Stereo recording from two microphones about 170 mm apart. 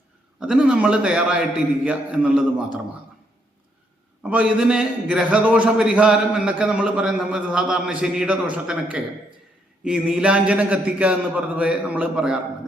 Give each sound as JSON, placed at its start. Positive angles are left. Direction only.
{"t": 0.3, "sound": "a man's voice", "side_deg": -5}
{"t": 4.2, "sound": "a man's voice", "side_deg": -5}